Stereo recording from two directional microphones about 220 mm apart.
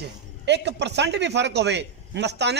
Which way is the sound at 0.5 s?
50° right (ahead or behind).